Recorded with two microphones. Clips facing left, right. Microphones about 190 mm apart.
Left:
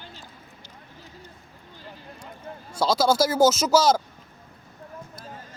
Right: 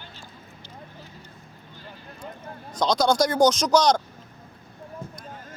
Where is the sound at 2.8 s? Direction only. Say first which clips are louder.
Even; 5° left (ahead or behind).